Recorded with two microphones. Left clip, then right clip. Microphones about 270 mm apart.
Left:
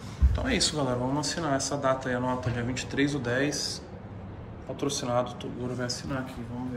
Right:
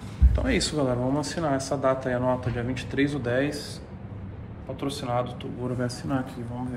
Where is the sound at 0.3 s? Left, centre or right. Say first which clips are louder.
Right 1 dB; centre.